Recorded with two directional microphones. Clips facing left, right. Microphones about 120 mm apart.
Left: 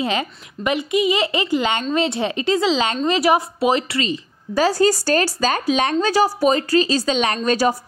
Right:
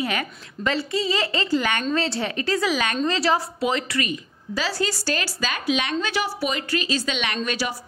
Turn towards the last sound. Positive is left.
turn(degrees=40)  # may be behind; listen again after turning